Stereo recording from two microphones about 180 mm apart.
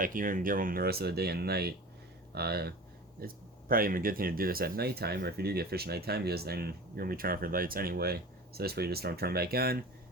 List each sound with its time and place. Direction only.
0.0 s speech: 50° right (ahead or behind)